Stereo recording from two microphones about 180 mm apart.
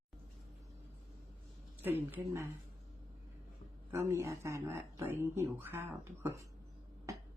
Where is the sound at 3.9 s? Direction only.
15° right (ahead or behind).